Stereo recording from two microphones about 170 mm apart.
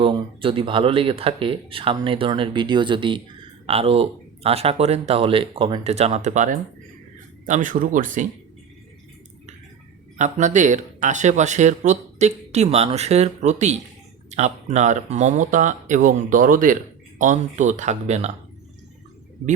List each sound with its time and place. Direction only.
0.0 s speech: 30° right (ahead or behind); by 8.3 s 50° right (ahead or behind)
10.2 s speech: 45° right (ahead or behind)